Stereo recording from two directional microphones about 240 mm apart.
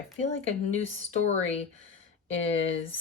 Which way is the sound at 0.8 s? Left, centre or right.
Left.